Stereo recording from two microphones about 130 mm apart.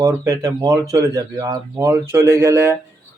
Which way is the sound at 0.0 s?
20° right (ahead or behind).